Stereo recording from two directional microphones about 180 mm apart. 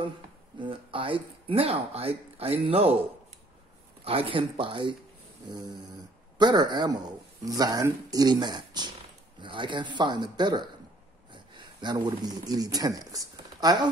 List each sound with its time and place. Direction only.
0.6 s speech: 30° right (ahead or behind)
4.0 s speech: 30° right (ahead or behind)
6.3 s speech: 25° right (ahead or behind)